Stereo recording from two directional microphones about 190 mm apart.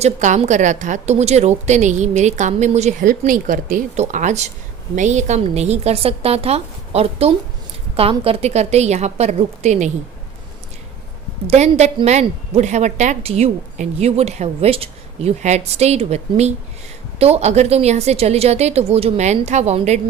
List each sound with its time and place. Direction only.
0.0 s a woman's voice: 35° right (ahead or behind)
11.4 s a woman's voice: 35° right (ahead or behind)